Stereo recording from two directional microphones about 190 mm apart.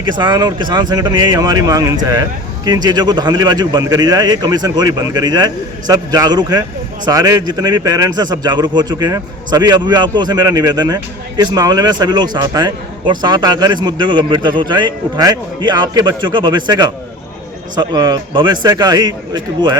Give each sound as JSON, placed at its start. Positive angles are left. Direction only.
{"t": 0.1, "sound": "a man's voice", "side_deg": -25}